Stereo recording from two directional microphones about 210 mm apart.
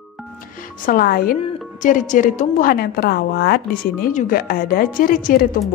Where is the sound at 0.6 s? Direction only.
40° left (ahead or behind).